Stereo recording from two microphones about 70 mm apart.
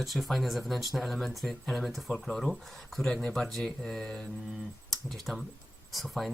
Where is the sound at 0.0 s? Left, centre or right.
Centre.